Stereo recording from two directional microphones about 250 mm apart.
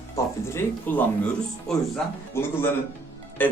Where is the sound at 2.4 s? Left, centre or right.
Centre.